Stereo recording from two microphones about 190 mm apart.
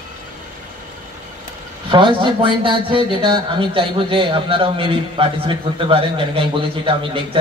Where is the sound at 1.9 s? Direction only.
25° right (ahead or behind).